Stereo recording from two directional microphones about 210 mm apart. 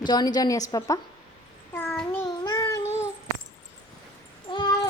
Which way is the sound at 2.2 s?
20° left (ahead or behind).